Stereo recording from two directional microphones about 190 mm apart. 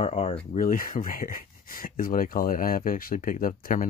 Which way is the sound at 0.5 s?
45° left (ahead or behind).